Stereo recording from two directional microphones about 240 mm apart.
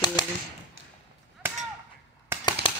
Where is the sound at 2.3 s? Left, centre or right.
Centre.